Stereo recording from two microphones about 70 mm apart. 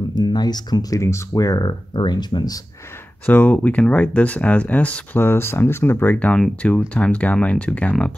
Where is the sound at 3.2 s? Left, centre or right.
Left.